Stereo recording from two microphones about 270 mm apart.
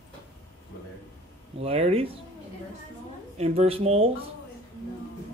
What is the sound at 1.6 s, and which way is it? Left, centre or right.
Speech, right.